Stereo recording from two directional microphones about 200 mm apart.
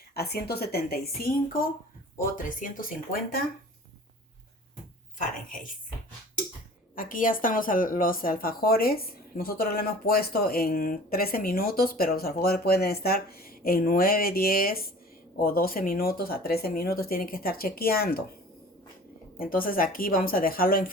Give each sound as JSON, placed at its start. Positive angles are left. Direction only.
{"t": 0.1, "sound": "speech", "side_deg": 50}
{"t": 6.9, "sound": "speech", "side_deg": 45}
{"t": 19.4, "sound": "speech", "side_deg": 45}